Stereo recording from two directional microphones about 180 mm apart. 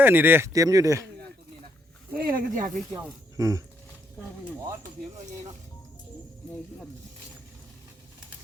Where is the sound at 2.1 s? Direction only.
55° right (ahead or behind).